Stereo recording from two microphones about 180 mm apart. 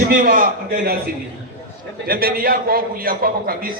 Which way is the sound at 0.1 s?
50° right (ahead or behind).